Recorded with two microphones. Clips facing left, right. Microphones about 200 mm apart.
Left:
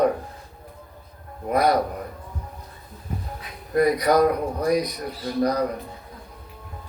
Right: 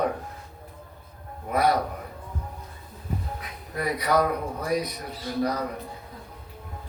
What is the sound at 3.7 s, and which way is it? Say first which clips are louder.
A man's voice: left 6 dB; 40° left (ahead or behind).